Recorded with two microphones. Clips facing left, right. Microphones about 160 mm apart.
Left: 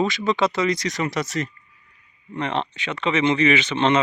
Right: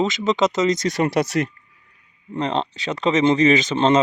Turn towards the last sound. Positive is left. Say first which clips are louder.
# right 3 dB
turn(degrees=-40)  # may be behind; listen again after turning